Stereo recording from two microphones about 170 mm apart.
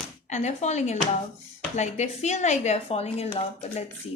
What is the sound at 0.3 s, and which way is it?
Speech, 40° left (ahead or behind).